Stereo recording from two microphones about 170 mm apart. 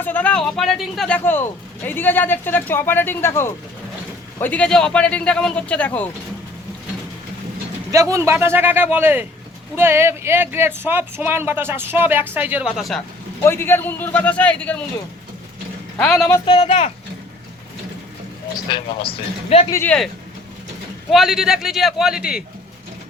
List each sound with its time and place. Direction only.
0.0 s speech: 10° left (ahead or behind)
8.1 s speech: 15° right (ahead or behind)
13.4 s speech: 15° left (ahead or behind)
16.0 s speech: 5° left (ahead or behind)
16.5 s speech: 35° left (ahead or behind)
18.7 s speech: 35° left (ahead or behind)
19.7 s speech: 10° left (ahead or behind)
21.1 s speech: centre (ahead or behind)